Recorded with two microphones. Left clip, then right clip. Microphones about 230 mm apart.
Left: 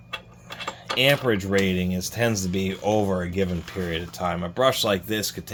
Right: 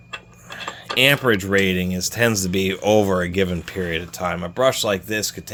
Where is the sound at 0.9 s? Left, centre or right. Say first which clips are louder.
Right 4 dB; right.